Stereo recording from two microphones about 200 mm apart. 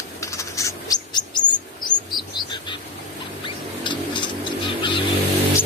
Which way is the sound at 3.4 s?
25° left (ahead or behind).